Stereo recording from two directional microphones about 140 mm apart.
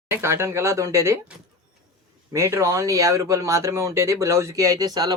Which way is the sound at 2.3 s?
20° right (ahead or behind).